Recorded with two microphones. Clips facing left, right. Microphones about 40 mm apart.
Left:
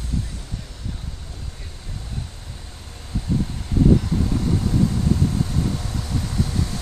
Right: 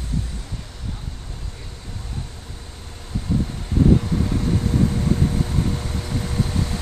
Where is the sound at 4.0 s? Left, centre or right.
Right.